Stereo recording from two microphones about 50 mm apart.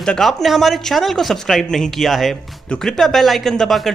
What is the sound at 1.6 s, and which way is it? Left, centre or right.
Speech, centre.